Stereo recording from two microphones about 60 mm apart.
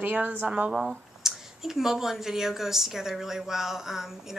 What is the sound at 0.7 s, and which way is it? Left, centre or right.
A woman's voice, centre.